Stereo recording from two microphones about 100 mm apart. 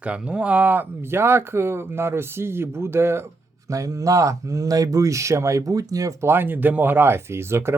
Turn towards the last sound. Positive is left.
turn(degrees=-25)  # may be behind; listen again after turning